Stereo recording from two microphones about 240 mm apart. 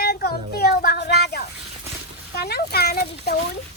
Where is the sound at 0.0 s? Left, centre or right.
Left.